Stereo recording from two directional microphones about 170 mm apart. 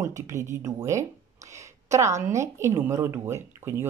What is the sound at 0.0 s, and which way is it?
Speech, 15° right (ahead or behind).